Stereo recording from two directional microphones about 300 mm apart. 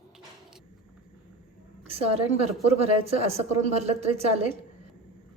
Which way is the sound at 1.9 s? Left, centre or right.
Centre.